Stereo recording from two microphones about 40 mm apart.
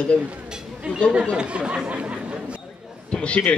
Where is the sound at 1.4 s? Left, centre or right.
Right.